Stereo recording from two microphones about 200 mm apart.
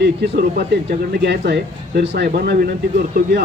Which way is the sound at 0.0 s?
55° right (ahead or behind).